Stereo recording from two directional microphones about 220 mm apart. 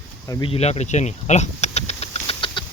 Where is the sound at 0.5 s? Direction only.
30° left (ahead or behind).